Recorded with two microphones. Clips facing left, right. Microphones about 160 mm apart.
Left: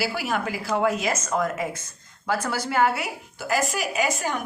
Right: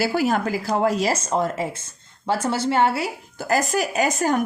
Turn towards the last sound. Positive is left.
turn(degrees=-40)  # may be behind; listen again after turning